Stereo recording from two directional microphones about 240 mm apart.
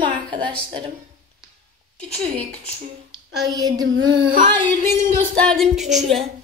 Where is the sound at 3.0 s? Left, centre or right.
Centre.